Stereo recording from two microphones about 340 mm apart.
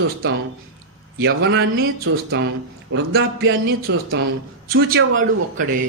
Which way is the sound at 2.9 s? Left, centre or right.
Right.